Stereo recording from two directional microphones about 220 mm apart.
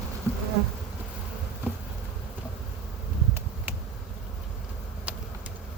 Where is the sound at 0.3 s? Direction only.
10° right (ahead or behind).